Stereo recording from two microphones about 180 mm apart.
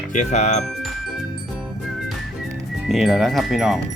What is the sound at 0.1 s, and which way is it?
Speech, 40° left (ahead or behind).